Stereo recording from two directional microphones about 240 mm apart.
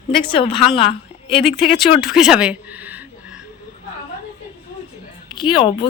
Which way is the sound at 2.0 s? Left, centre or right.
Centre.